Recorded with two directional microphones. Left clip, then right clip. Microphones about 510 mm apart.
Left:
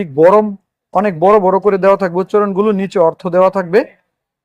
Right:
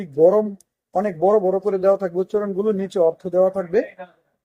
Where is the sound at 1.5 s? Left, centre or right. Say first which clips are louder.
Left 7 dB; left.